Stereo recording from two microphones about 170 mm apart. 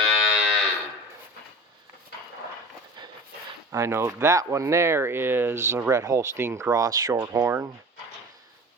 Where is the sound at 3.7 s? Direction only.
15° right (ahead or behind).